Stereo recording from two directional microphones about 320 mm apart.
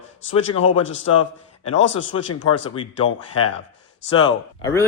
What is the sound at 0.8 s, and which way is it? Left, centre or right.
A man's voice, left.